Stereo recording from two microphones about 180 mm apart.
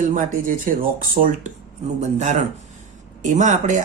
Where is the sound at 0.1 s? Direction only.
45° right (ahead or behind).